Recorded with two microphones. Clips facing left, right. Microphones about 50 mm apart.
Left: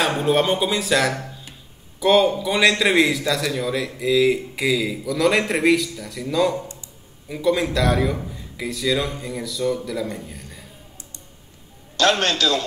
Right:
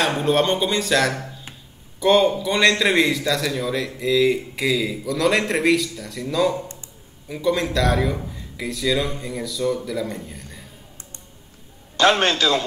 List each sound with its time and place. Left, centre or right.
0.0 s a man's voice: centre
12.0 s a man's voice: centre